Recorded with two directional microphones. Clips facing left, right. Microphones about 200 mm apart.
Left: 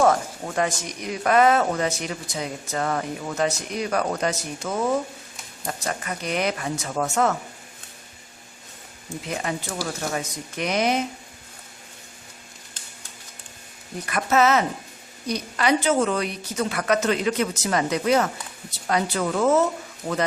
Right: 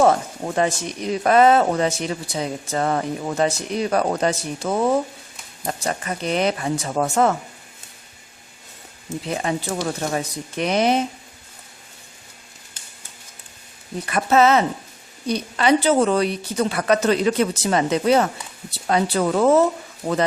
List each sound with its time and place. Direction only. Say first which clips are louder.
0.0 s a woman's voice: right 3 dB; 25° right (ahead or behind)
9.0 s a woman's voice: right 4 dB; 30° right (ahead or behind)
14.1 s a woman's voice: right 4 dB; 30° right (ahead or behind)